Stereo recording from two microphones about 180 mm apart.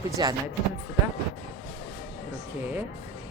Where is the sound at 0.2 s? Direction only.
25° right (ahead or behind).